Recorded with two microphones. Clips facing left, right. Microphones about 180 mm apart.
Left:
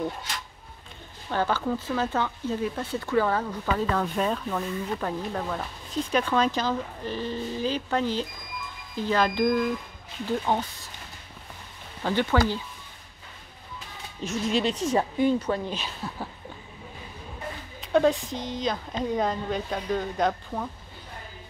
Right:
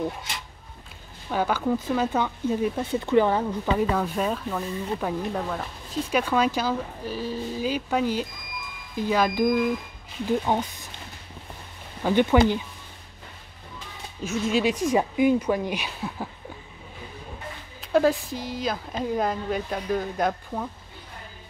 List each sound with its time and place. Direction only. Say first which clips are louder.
1.3 s speech: right 2 dB; 10° right (ahead or behind)
3.9 s speech: right 1 dB; 5° right (ahead or behind)
12.0 s speech: right 5 dB; 15° right (ahead or behind)
14.2 s speech: right 2 dB; 5° right (ahead or behind)
17.7 s speech: right 1 dB; 5° right (ahead or behind)